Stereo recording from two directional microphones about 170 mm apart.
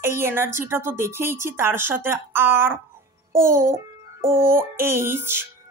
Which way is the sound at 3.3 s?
15° right (ahead or behind).